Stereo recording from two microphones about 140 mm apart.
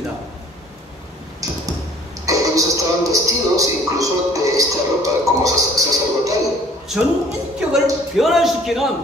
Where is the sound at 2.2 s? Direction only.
25° right (ahead or behind).